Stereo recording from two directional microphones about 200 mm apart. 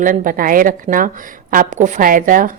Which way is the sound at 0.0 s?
40° right (ahead or behind).